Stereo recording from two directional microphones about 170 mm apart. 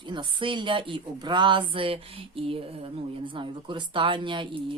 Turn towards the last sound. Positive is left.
turn(degrees=-30)  # may be behind; listen again after turning